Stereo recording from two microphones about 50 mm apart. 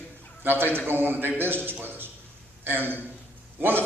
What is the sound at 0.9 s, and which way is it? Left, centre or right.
A man's voice, right.